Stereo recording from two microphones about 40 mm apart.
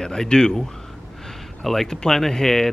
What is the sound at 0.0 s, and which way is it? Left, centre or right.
Speech, centre.